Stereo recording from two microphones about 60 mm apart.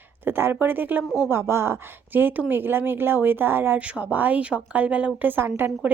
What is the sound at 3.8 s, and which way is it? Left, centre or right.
Speech, right.